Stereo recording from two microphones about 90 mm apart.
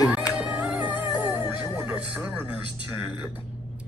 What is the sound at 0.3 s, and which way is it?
Music, 10° right (ahead or behind).